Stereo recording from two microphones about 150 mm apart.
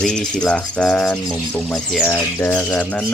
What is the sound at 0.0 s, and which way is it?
Speech, 5° left (ahead or behind).